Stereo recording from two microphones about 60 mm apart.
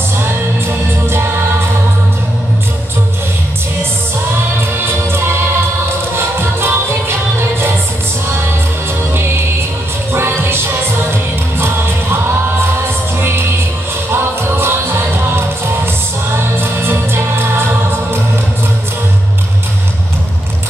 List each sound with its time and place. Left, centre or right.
6.1 s music: right
10.1 s music: right
13.2 s music: right